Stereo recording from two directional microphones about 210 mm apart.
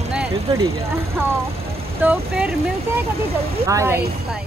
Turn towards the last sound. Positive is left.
turn(degrees=-15)  # may be behind; listen again after turning